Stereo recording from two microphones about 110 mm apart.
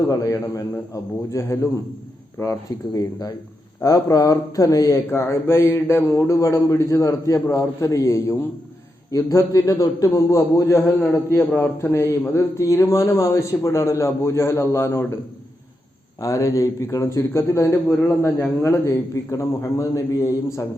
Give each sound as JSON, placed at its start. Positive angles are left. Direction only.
{"t": 0.0, "sound": "a man's voice", "side_deg": 30}
{"t": 16.2, "sound": "a man's voice", "side_deg": 30}